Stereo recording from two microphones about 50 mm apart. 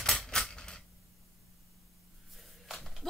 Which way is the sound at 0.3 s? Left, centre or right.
Centre.